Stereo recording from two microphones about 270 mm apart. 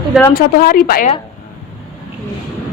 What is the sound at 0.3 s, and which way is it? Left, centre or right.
Speech, left.